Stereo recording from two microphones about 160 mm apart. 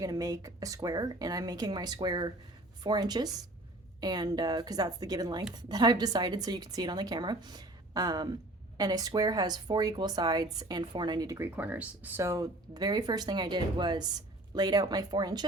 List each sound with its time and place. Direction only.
0.0 s speech: 20° right (ahead or behind)